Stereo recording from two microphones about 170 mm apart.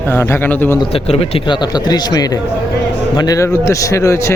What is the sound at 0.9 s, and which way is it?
A man's voice, 35° left (ahead or behind).